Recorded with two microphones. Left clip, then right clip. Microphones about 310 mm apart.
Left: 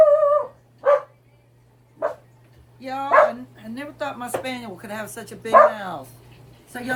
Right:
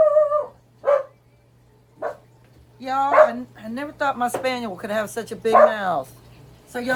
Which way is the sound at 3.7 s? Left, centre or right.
Right.